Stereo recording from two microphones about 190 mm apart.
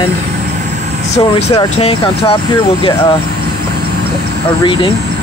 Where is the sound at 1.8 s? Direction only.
30° left (ahead or behind).